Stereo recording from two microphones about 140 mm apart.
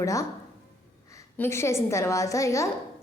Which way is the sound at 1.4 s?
20° left (ahead or behind).